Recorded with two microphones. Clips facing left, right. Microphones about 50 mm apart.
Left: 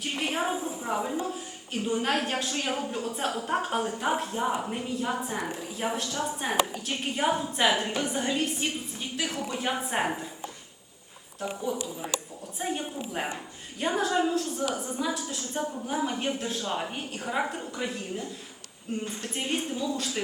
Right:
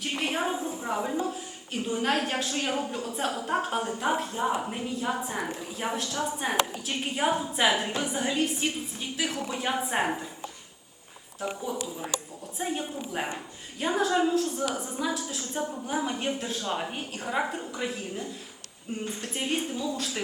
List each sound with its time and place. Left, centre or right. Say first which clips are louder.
0.0 s a sound: even; centre
1.7 s a woman's voice: even; centre
11.3 s a woman's voice: left 1 dB; centre